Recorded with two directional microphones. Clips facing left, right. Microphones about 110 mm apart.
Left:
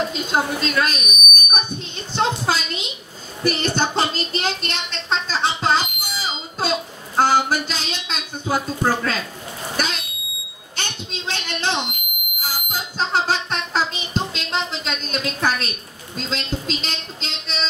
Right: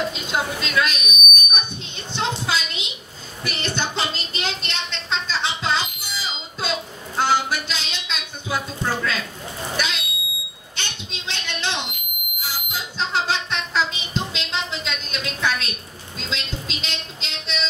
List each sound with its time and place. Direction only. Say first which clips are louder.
0.3 s a child's voice: left 5 dB; 40° left (ahead or behind)
3.4 s a sound: left 6 dB; 40° left (ahead or behind)
9.8 s smoke detector: left 2 dB; 40° left (ahead or behind)
10.8 s a sound: left 4 dB; 40° left (ahead or behind)
12.4 s smoke detector: left 2 dB; 45° left (ahead or behind)
16.3 s music: left 5 dB; 40° left (ahead or behind)